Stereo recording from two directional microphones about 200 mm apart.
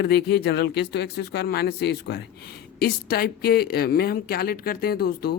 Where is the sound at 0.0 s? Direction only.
55° left (ahead or behind).